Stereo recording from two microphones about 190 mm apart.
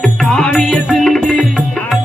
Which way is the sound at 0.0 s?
5° left (ahead or behind).